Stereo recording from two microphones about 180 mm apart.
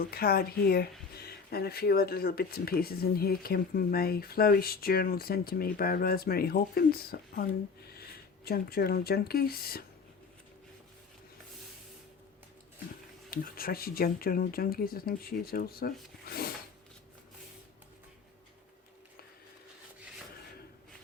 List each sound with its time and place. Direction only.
0.0 s speech: 60° left (ahead or behind)
13.3 s speech: 55° left (ahead or behind)